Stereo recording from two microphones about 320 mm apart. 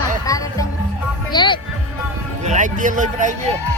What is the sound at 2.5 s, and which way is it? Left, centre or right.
A man's voice, right.